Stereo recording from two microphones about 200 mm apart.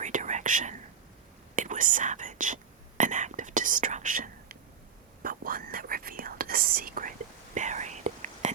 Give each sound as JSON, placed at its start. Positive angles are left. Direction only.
{"t": 0.0, "sound": "whispering", "side_deg": -35}
{"t": 1.5, "sound": "speech", "side_deg": -40}
{"t": 3.0, "sound": "whispering", "side_deg": -40}